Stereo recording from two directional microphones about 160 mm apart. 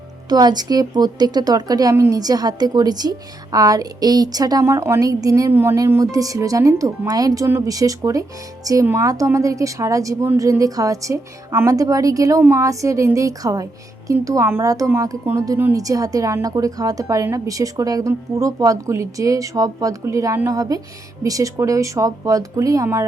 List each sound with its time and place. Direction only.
0.3 s speech: 25° right (ahead or behind)